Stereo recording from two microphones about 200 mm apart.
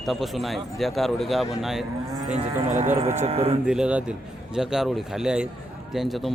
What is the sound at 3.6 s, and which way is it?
Speech, 5° right (ahead or behind).